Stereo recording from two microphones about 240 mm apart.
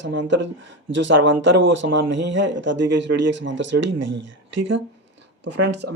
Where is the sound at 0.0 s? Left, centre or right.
Right.